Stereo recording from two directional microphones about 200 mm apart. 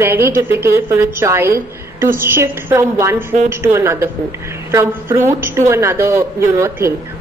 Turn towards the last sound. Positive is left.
turn(degrees=-15)  # may be behind; listen again after turning